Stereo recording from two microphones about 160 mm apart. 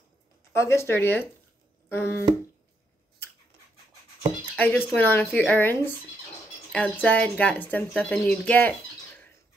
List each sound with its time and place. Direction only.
0.5 s speech: 15° left (ahead or behind)
4.6 s speech: 10° left (ahead or behind)